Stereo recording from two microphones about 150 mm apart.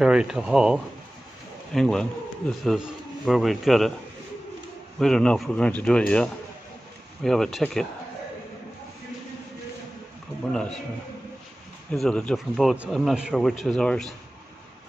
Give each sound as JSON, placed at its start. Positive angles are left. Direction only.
{"t": 0.0, "sound": "a man's voice", "side_deg": -5}
{"t": 4.9, "sound": "a man's voice", "side_deg": 5}
{"t": 11.9, "sound": "a man's voice", "side_deg": 5}